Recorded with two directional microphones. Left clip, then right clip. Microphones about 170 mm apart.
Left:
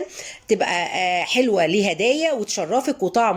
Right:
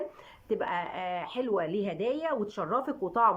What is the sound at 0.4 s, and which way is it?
Speech, 5° left (ahead or behind).